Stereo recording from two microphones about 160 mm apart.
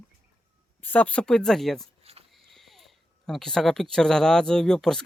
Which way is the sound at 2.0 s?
40° right (ahead or behind).